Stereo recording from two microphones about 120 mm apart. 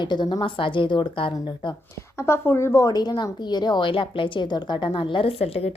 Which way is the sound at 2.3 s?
20° left (ahead or behind).